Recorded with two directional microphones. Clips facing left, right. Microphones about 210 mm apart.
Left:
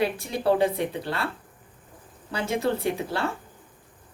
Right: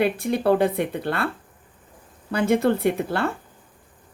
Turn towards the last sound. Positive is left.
turn(degrees=-60)  # may be behind; listen again after turning